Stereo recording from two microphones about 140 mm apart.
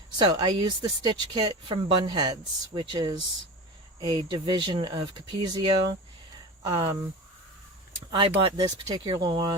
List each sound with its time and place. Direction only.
0.2 s speech: 30° right (ahead or behind)
8.4 s speech: 35° right (ahead or behind)